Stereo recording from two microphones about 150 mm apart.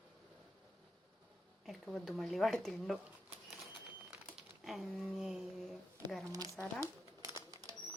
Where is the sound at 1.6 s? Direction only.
Centre (ahead or behind).